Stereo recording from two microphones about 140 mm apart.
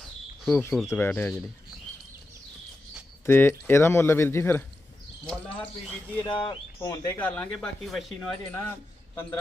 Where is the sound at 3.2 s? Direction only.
15° left (ahead or behind).